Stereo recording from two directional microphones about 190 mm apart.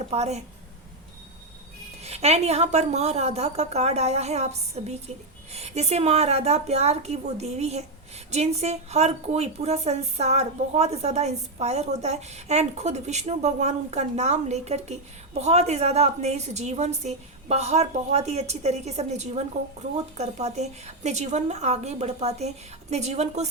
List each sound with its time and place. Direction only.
0.1 s a woman's voice: 35° right (ahead or behind)
2.0 s a woman's voice: 35° right (ahead or behind)